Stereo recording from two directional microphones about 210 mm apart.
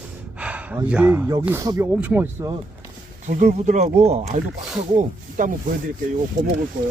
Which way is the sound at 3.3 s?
35° right (ahead or behind).